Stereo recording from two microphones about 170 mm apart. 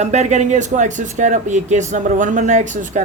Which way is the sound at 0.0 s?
40° right (ahead or behind).